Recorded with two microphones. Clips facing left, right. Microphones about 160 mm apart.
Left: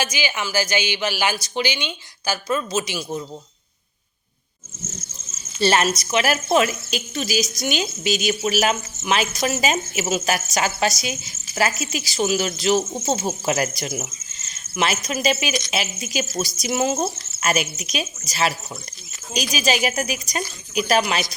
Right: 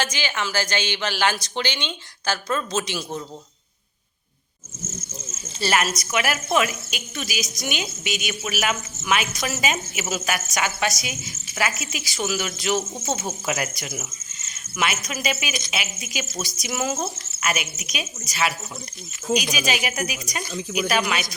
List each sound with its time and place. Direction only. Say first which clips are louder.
0.0 s a woman's voice: left 1 dB; 10° left (ahead or behind)
5.5 s speech: left 4 dB; 25° left (ahead or behind)